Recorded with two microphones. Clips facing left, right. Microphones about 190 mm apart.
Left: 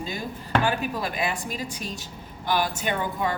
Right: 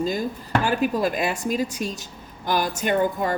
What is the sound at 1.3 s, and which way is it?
A woman's voice, 45° right (ahead or behind).